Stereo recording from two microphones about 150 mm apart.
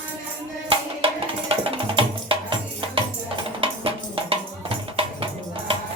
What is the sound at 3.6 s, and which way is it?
Music, 40° right (ahead or behind).